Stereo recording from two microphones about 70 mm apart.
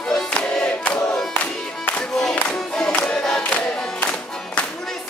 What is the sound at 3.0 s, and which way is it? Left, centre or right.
Choir, centre.